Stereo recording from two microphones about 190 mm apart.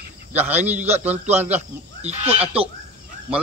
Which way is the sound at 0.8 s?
35° right (ahead or behind).